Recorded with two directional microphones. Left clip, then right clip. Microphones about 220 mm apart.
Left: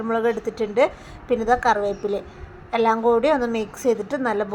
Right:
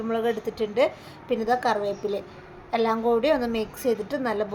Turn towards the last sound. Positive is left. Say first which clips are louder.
# left 3 dB
turn(degrees=15)  # may be behind; listen again after turning